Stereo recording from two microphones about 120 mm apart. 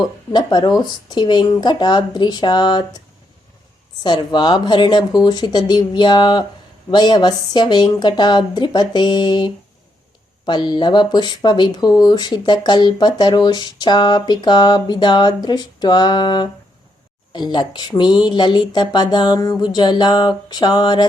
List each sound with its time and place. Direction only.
0.3 s speech: 35° left (ahead or behind)
4.0 s speech: 35° left (ahead or behind)